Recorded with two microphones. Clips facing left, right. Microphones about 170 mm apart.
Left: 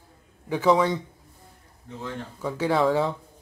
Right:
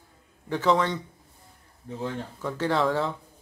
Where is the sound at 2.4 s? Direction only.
10° left (ahead or behind).